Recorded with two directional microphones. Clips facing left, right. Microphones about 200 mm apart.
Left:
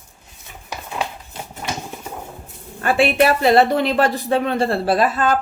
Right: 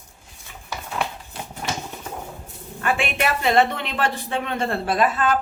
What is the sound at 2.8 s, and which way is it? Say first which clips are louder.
A woman's voice: left 7 dB; 35° left (ahead or behind).